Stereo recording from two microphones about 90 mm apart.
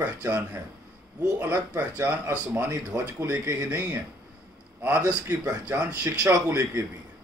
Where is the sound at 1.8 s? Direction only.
15° right (ahead or behind).